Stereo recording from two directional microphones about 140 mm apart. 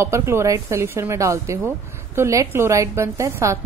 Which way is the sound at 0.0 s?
20° right (ahead or behind).